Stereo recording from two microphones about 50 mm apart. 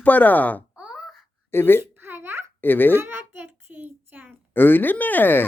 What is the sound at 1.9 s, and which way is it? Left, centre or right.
Babbling, right.